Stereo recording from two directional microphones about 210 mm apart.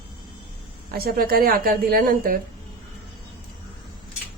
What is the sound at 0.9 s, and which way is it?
A woman's voice, 45° right (ahead or behind).